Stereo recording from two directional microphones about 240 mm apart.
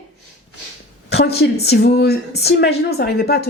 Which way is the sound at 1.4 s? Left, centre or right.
Left.